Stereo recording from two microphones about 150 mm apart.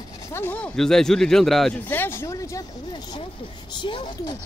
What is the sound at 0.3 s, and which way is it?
Speech, 15° left (ahead or behind).